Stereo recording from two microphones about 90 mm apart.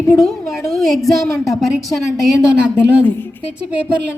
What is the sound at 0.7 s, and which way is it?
A woman's voice, 5° left (ahead or behind).